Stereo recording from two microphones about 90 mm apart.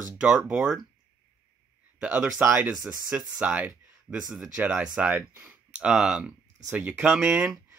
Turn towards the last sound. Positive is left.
turn(degrees=-10)  # may be behind; listen again after turning